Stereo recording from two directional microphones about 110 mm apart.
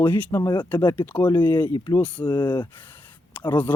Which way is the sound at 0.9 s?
15° left (ahead or behind).